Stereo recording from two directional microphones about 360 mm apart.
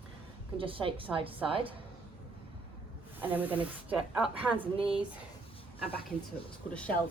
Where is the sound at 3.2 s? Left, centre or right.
Centre.